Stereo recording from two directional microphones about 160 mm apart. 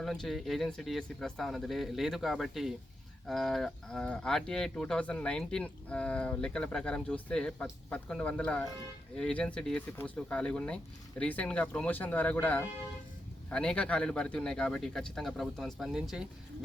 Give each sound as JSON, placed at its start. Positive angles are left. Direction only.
{"t": 0.0, "sound": "a man's voice", "side_deg": 0}